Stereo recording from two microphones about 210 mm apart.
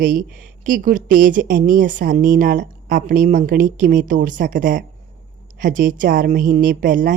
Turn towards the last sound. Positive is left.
turn(degrees=-40)  # may be behind; listen again after turning